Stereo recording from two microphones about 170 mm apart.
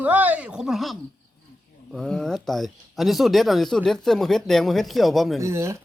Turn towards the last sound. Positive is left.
turn(degrees=-15)  # may be behind; listen again after turning